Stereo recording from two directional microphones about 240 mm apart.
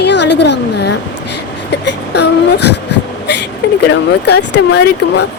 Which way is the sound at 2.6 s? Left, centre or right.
Left.